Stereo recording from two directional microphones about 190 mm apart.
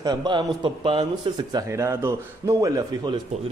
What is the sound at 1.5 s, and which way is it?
Speech, 15° right (ahead or behind).